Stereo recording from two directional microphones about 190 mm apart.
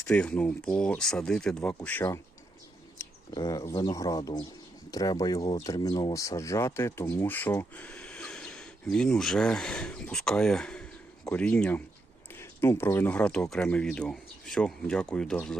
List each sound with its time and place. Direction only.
0.1 s speech: 5° left (ahead or behind)
3.0 s bird: 20° left (ahead or behind)
3.7 s speech: 20° left (ahead or behind)